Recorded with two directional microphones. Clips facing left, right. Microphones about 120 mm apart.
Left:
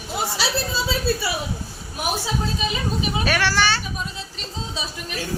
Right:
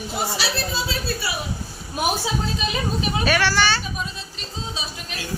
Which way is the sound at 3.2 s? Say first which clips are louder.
Right 2 dB; 5° right (ahead or behind).